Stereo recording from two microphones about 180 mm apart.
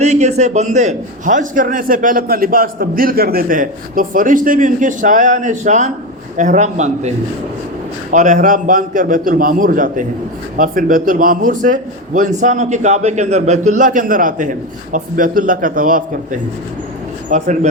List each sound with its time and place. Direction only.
0.0 s a man's voice: 40° right (ahead or behind)
8.1 s a man's voice: 45° right (ahead or behind)